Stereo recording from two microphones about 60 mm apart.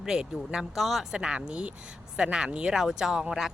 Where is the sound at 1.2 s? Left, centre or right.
Centre.